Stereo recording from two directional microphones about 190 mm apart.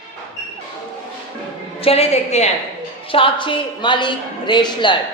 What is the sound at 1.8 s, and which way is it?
A woman's voice, 30° left (ahead or behind).